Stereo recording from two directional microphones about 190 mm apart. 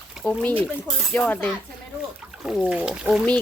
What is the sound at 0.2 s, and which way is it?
Speech, 5° left (ahead or behind).